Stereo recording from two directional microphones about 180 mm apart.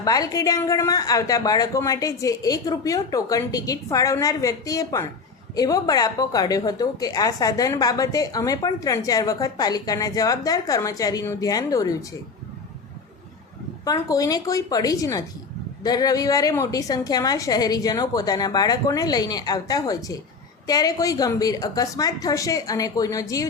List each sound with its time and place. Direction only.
0.0 s a woman's voice: 20° left (ahead or behind)
13.8 s a woman's voice: 20° left (ahead or behind)